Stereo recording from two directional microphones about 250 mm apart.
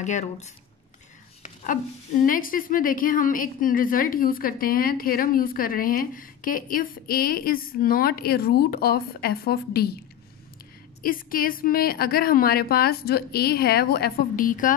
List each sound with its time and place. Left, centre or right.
0.0 s speech: left
1.4 s a sound: left
2.2 s a woman's voice: left
11.0 s a woman's voice: left